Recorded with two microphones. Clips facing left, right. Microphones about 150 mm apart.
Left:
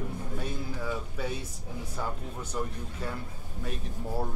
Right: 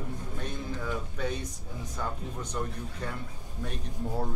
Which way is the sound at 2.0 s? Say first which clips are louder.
Right 1 dB; 5° left (ahead or behind).